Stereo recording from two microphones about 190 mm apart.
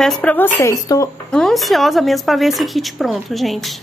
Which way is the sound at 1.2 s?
5° left (ahead or behind).